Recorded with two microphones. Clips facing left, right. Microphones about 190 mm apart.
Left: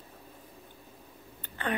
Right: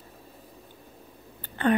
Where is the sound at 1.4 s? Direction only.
35° right (ahead or behind).